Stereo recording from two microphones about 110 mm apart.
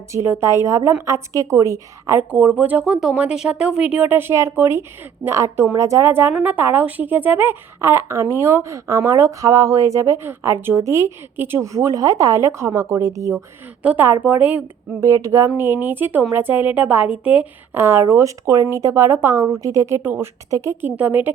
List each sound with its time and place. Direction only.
0.1 s speech: 25° right (ahead or behind)
2.3 s speech: 15° right (ahead or behind); by 13.4 s 30° right (ahead or behind)
13.8 s speech: 20° right (ahead or behind)
15.0 s speech: 30° right (ahead or behind)